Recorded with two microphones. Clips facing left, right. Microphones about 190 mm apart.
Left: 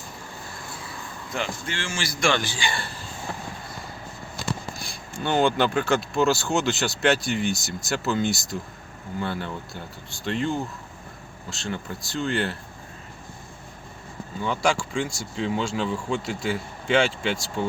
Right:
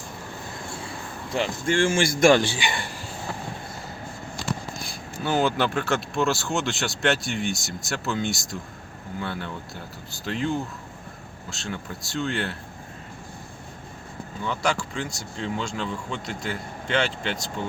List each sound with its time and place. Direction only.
0.7 s a sound: 30° right (ahead or behind)
1.6 s speech: 50° right (ahead or behind)
2.3 s speech: 25° right (ahead or behind)
5.2 s speech: 5° right (ahead or behind)
14.4 s speech: 5° left (ahead or behind)